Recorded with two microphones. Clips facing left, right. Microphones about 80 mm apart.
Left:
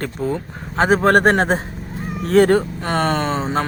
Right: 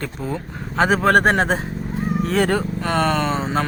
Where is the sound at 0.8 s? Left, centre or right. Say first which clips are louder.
Left 1 dB; left.